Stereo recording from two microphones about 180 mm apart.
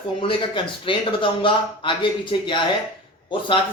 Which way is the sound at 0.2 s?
30° left (ahead or behind).